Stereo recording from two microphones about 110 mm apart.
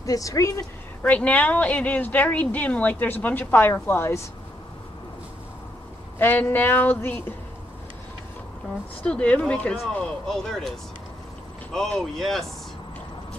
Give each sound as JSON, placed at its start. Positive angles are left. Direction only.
{"t": 0.0, "sound": "speech", "side_deg": 30}
{"t": 1.0, "sound": "speech", "side_deg": 15}
{"t": 6.1, "sound": "speech", "side_deg": 15}
{"t": 9.0, "sound": "speech", "side_deg": 10}
{"t": 11.7, "sound": "speech", "side_deg": 5}